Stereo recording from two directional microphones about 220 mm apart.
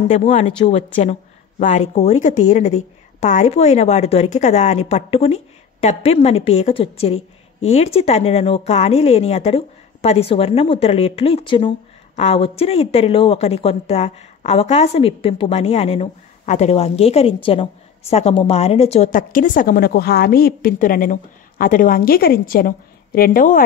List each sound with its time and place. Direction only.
0.1 s a woman's voice: 30° left (ahead or behind)